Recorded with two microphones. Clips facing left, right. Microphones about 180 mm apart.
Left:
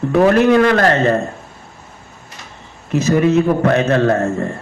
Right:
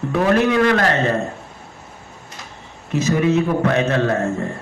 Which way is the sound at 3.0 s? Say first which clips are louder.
Left 4 dB; 45° left (ahead or behind).